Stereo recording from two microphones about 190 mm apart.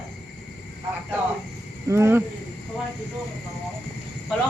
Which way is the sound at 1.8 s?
15° right (ahead or behind).